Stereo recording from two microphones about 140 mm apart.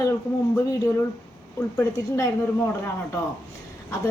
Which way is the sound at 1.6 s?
20° left (ahead or behind).